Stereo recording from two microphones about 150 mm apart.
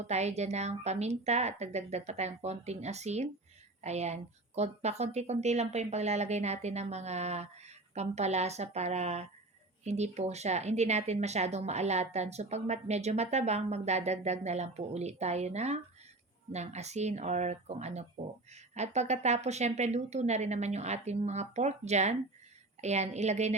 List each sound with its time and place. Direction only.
0.0 s speech: 50° right (ahead or behind)